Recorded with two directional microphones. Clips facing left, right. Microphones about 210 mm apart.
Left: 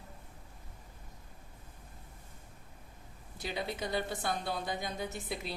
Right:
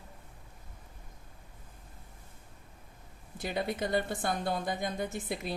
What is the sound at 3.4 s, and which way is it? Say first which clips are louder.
Speech: right 4 dB; 50° right (ahead or behind).